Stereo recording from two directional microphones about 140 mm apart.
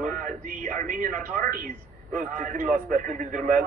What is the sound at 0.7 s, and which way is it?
Speech, 80° right.